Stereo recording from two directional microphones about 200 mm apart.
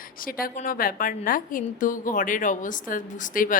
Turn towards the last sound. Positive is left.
turn(degrees=40)  # may be behind; listen again after turning